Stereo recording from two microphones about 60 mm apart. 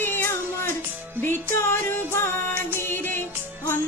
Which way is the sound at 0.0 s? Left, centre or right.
Left.